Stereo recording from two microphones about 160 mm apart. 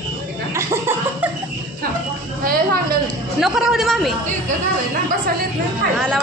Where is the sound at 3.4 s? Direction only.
Centre (ahead or behind).